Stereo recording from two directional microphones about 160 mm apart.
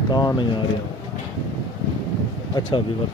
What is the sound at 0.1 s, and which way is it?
Speech, 25° left (ahead or behind).